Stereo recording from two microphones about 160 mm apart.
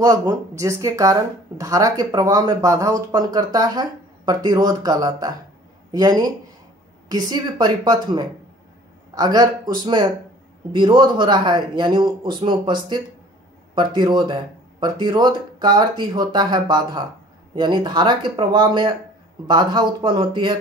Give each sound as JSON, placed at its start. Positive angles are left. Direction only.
{"t": 0.0, "sound": "speech", "side_deg": -25}